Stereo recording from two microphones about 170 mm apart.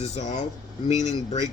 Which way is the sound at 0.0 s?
40° left (ahead or behind).